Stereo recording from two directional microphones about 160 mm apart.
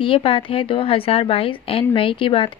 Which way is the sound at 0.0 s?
35° left (ahead or behind).